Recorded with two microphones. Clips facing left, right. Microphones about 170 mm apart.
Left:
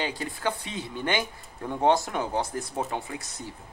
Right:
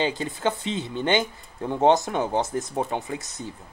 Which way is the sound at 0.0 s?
25° right (ahead or behind).